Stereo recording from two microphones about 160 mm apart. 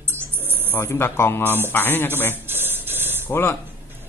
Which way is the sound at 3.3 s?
15° left (ahead or behind).